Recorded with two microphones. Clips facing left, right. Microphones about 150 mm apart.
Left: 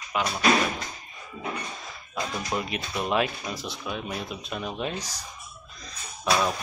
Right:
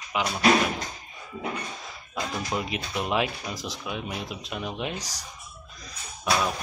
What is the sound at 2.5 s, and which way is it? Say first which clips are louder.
Speech: even; 15° right (ahead or behind).